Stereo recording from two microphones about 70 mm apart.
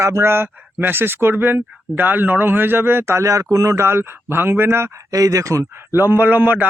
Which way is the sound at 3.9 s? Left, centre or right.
Right.